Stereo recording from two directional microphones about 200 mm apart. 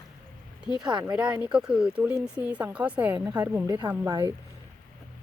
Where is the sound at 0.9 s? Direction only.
20° right (ahead or behind).